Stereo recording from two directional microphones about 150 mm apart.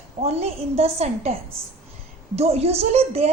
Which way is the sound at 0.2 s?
45° right (ahead or behind).